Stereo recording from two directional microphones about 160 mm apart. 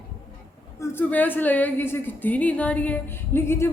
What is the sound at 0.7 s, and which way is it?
A woman's voice, 15° left (ahead or behind).